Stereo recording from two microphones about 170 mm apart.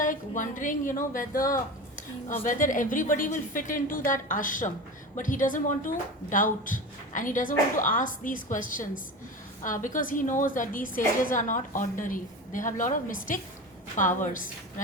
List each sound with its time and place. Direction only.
0.0 s speech: 50° left (ahead or behind)